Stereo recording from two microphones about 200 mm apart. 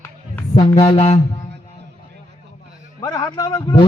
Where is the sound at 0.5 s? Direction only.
20° left (ahead or behind).